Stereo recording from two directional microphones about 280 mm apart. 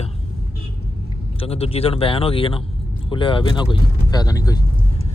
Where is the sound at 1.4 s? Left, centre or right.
Left.